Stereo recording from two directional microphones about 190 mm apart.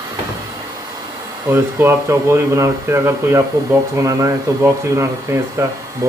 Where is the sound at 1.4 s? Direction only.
10° right (ahead or behind).